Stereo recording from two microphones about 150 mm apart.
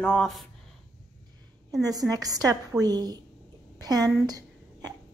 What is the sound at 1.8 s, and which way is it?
Speech, 25° right (ahead or behind).